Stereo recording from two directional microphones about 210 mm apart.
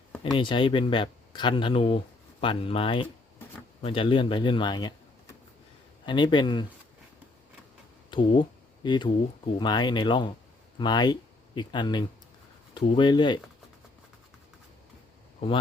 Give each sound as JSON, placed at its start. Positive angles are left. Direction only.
{"t": 0.2, "sound": "speech", "side_deg": 25}
{"t": 6.1, "sound": "speech", "side_deg": 20}
{"t": 8.1, "sound": "speech", "side_deg": 20}